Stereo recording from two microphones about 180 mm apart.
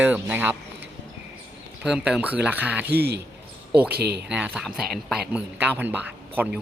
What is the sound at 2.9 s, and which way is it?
Speech, 65° right (ahead or behind).